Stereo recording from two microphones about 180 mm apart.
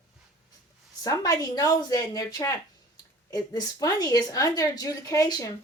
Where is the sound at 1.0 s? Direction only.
20° left (ahead or behind).